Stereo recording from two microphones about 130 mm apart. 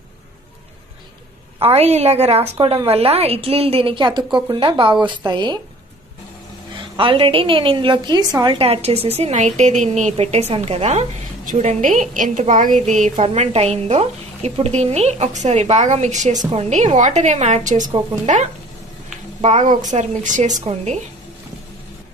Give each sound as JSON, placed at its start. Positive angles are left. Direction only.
{"t": 1.6, "sound": "a woman's voice", "side_deg": -50}
{"t": 7.0, "sound": "a woman's voice", "side_deg": -40}
{"t": 8.6, "sound": "a woman's voice", "side_deg": -50}
{"t": 13.2, "sound": "a woman's voice", "side_deg": -55}
{"t": 19.4, "sound": "a woman's voice", "side_deg": -70}